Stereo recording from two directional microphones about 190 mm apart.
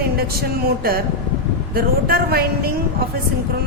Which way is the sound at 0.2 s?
55° right (ahead or behind).